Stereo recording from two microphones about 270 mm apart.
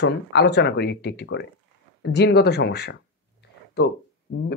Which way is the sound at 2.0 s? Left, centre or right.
Left.